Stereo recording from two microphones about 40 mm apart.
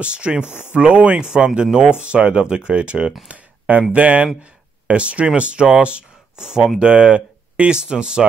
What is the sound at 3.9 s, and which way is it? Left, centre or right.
A man's voice, right.